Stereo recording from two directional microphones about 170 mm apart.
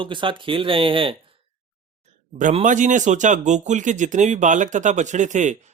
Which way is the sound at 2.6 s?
45° right (ahead or behind).